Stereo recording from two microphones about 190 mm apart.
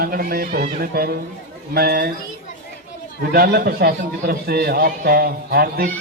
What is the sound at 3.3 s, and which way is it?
A man's voice, 55° right (ahead or behind).